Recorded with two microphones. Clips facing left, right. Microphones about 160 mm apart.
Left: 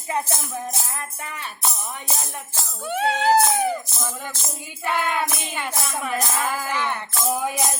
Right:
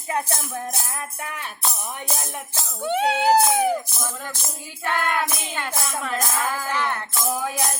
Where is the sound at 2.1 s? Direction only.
15° right (ahead or behind).